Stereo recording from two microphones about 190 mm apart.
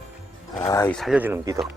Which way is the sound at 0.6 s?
15° left (ahead or behind).